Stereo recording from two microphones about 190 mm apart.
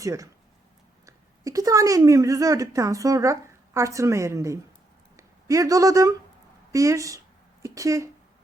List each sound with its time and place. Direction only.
0.0 s a woman's voice: 15° right (ahead or behind)